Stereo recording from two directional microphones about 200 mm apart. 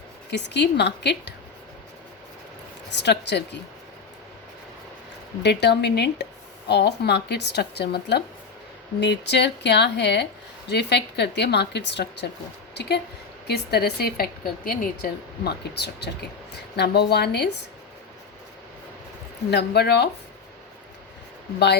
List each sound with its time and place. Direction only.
0.3 s a woman's voice: 60° left (ahead or behind)
2.9 s a woman's voice: 60° left (ahead or behind)
5.4 s a woman's voice: 55° left (ahead or behind)
19.5 s a woman's voice: 55° left (ahead or behind)